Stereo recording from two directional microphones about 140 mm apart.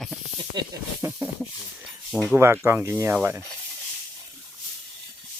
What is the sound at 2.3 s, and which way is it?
Speech, 20° right (ahead or behind).